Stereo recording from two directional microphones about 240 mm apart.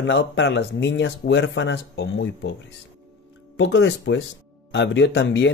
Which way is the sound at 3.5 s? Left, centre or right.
Left.